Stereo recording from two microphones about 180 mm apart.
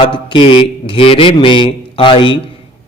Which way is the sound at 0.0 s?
25° left (ahead or behind).